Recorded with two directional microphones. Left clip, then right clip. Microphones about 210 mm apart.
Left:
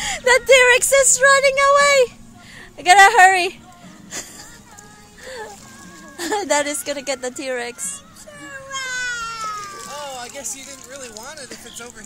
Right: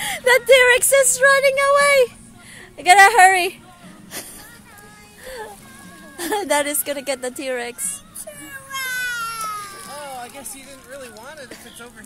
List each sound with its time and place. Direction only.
0.0 s a sound: 5° right (ahead or behind)
0.5 s speech: 5° right (ahead or behind)
5.2 s music: 5° right (ahead or behind)
6.1 s speech: 5° right (ahead or behind)
8.6 s cat: 55° right (ahead or behind)
9.8 s a sound: 20° left (ahead or behind)
10.7 s speech: 50° left (ahead or behind)